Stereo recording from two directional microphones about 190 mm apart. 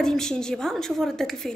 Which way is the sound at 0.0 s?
5° left (ahead or behind).